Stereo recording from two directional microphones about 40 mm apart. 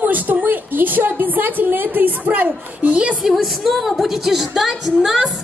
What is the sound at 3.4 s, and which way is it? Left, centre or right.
A woman's voice, centre.